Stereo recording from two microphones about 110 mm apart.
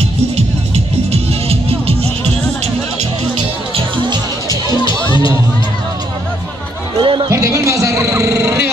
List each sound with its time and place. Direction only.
1.1 s music: 60° right (ahead or behind)
7.0 s music: 45° right (ahead or behind)
7.2 s a sound: 30° right (ahead or behind)